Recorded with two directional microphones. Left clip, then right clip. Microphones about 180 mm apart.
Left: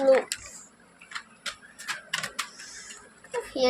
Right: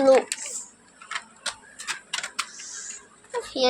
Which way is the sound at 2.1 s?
15° right (ahead or behind).